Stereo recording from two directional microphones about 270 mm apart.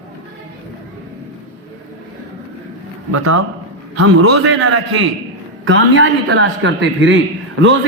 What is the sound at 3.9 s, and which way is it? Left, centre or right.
Speech, right.